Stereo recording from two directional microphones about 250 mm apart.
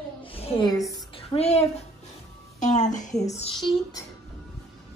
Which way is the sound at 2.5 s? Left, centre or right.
Left.